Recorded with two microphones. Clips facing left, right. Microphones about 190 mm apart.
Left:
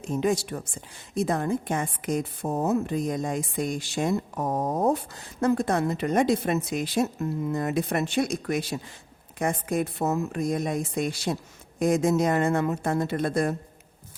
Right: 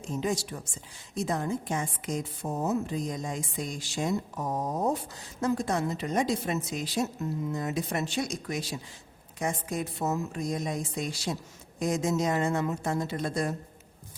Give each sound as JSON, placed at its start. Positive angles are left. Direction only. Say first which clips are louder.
{"t": 0.0, "sound": "a woman's voice", "louder": "left 5 dB", "side_deg": 60}